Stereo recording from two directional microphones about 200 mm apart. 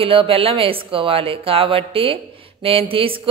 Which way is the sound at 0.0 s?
25° right (ahead or behind).